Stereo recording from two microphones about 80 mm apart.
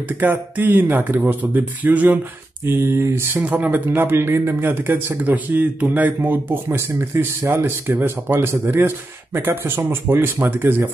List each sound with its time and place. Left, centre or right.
0.2 s speech: right
2.6 s speech: right
3.3 s speech: centre